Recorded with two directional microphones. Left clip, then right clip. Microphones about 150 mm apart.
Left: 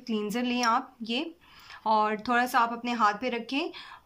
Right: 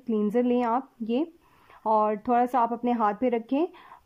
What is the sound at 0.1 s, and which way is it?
Speech, 30° right (ahead or behind).